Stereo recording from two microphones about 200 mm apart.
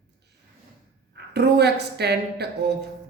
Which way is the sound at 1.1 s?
55° right (ahead or behind).